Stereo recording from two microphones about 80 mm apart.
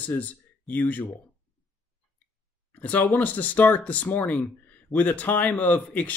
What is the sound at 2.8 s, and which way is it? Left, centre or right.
Speech, centre.